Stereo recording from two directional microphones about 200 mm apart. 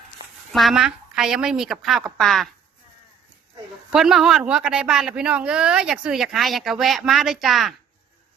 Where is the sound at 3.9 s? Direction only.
Centre (ahead or behind).